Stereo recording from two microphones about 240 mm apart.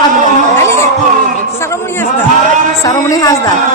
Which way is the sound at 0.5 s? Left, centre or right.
Centre.